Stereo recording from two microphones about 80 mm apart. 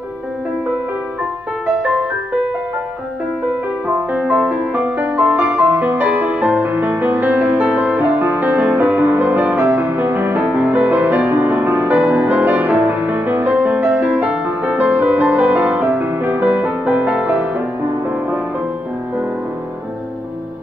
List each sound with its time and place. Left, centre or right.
3.8 s music: right
4.3 s music: centre
4.7 s music: centre